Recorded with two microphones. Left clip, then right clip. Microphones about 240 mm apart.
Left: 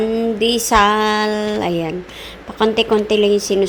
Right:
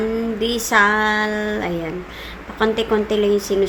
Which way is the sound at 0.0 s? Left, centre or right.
Left.